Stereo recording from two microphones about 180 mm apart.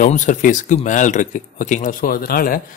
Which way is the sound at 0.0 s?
45° left (ahead or behind).